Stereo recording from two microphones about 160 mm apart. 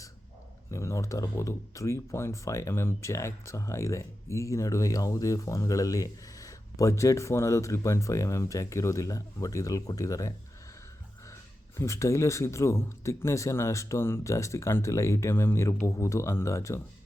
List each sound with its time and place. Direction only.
0.7 s speech: 20° left (ahead or behind)
11.8 s speech: 20° left (ahead or behind)